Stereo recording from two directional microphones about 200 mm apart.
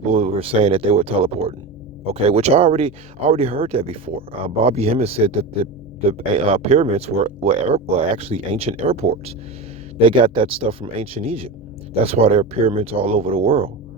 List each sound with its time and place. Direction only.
0.1 s speech: 30° right (ahead or behind)